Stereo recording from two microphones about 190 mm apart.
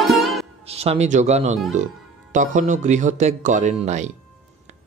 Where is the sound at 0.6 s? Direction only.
35° right (ahead or behind).